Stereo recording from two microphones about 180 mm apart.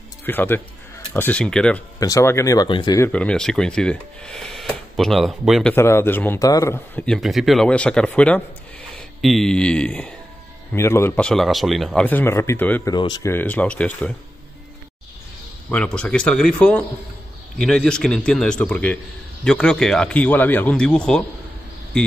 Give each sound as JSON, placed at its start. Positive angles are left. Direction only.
{"t": 0.2, "sound": "speech", "side_deg": 10}
{"t": 2.0, "sound": "speech", "side_deg": 20}
{"t": 3.1, "sound": "speech", "side_deg": 5}
{"t": 7.1, "sound": "speech", "side_deg": 0}
{"t": 12.9, "sound": "speech", "side_deg": 25}
{"t": 13.3, "sound": "speech", "side_deg": 10}
{"t": 15.7, "sound": "speech", "side_deg": 5}